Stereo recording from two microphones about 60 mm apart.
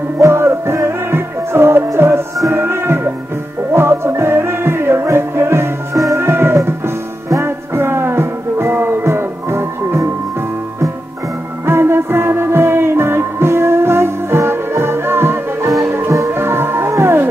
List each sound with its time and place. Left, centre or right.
0.2 s music: right
11.6 s music: right